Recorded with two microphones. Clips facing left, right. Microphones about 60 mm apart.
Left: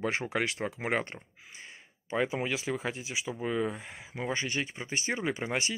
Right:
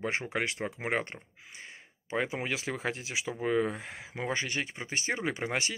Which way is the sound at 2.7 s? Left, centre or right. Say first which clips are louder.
Even; right.